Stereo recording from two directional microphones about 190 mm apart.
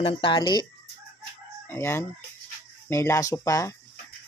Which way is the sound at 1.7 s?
15° left (ahead or behind).